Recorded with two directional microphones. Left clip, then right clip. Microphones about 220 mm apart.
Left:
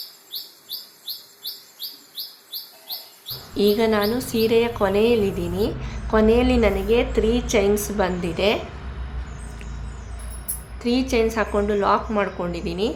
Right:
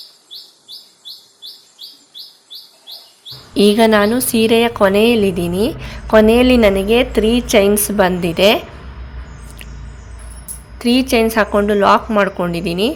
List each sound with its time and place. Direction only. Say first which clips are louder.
3.5 s a woman's voice: right 8 dB; 40° right (ahead or behind)
10.8 s a woman's voice: right 7 dB; 35° right (ahead or behind)